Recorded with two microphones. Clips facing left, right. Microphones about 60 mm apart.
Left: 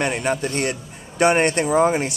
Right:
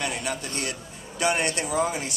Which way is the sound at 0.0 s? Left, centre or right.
Left.